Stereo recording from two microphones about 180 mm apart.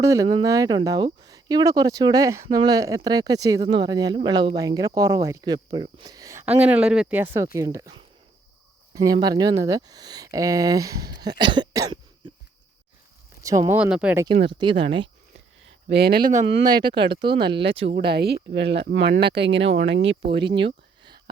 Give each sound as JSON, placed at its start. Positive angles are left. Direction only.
{"t": 0.0, "sound": "speech", "side_deg": -20}
{"t": 9.2, "sound": "speech", "side_deg": -20}
{"t": 13.4, "sound": "speech", "side_deg": -15}
{"t": 14.4, "sound": "speech", "side_deg": -25}
{"t": 15.6, "sound": "a sound", "side_deg": -65}
{"t": 16.6, "sound": "speech", "side_deg": -25}
{"t": 17.6, "sound": "speech", "side_deg": -90}
{"t": 17.9, "sound": "speech", "side_deg": -65}
{"t": 20.4, "sound": "a sound", "side_deg": -30}